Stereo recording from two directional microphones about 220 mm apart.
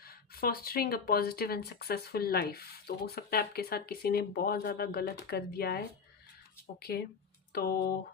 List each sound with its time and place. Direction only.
0.0 s speech: 45° left (ahead or behind)
7.5 s speech: 45° left (ahead or behind)